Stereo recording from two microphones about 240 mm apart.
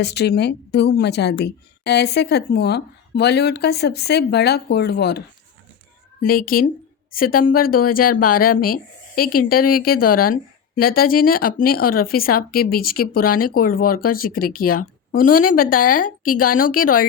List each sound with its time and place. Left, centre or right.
0.0 s a woman's voice: left
6.2 s speech: left